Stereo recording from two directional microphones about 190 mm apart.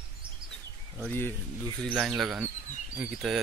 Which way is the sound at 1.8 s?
5° left (ahead or behind).